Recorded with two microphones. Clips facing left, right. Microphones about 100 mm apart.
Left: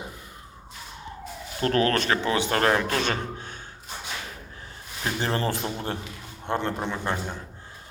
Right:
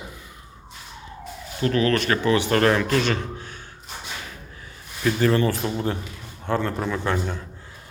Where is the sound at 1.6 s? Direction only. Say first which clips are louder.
Right 2 dB; 40° left (ahead or behind).